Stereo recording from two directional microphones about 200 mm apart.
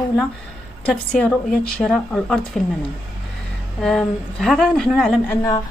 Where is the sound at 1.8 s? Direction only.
Centre (ahead or behind).